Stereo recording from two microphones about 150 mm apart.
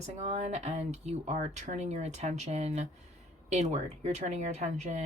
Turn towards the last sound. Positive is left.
turn(degrees=-50)  # may be behind; listen again after turning